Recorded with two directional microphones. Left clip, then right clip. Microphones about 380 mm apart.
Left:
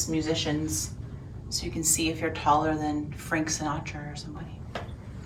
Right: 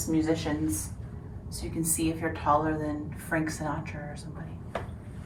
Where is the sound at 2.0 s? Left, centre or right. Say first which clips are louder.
Left 2 dB; centre.